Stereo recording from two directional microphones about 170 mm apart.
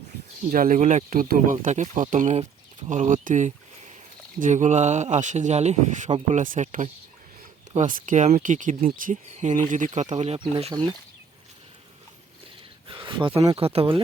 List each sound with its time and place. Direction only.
0.5 s speech: 50° right (ahead or behind); by 6.2 s 35° right (ahead or behind)
6.3 s speech: 50° right (ahead or behind); by 10.8 s 30° right (ahead or behind)
12.9 s speech: 30° right (ahead or behind)